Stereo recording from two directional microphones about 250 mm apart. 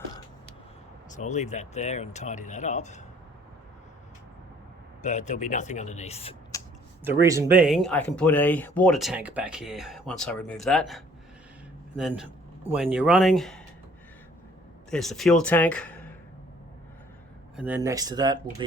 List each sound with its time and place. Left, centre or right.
1.1 s speech: left
5.0 s speech: left
6.5 s a sound: centre
7.0 s speech: centre
14.8 s speech: centre
17.6 s speech: centre